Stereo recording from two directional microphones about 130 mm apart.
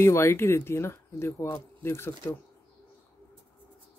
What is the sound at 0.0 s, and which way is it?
Speech, 20° left (ahead or behind).